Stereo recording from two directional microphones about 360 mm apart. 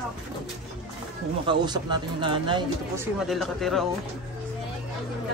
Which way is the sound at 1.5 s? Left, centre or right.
Centre.